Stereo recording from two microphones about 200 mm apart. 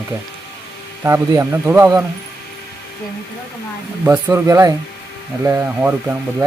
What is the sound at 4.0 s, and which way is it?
Speech, 10° right (ahead or behind).